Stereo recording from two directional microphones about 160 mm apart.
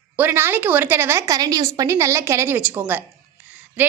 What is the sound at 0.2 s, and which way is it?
A woman's voice, 15° right (ahead or behind).